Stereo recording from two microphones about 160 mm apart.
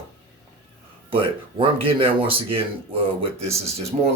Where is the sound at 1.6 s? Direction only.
35° right (ahead or behind).